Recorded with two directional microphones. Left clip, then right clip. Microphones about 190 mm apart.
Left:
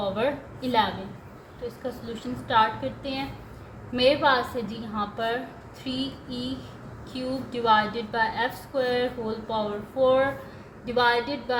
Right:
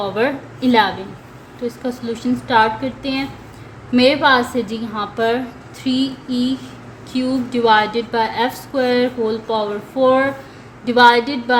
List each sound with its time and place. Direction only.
0.0 s a woman's voice: 50° right (ahead or behind)
2.2 s a woman's voice: 50° right (ahead or behind)